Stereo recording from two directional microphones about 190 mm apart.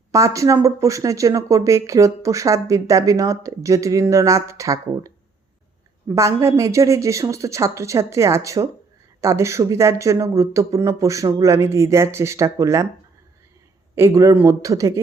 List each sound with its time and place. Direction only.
0.1 s speech: 15° right (ahead or behind)
13.9 s speech: 15° right (ahead or behind)